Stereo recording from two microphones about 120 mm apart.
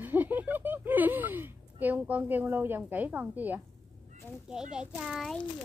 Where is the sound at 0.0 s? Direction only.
15° right (ahead or behind).